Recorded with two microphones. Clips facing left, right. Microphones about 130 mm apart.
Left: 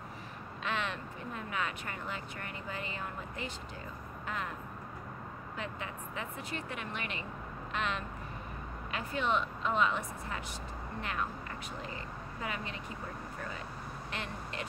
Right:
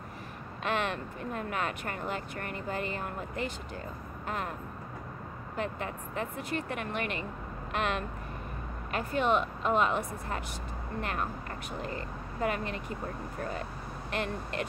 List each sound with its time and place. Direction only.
0.7 s speech: 50° right (ahead or behind)
5.6 s speech: 50° right (ahead or behind)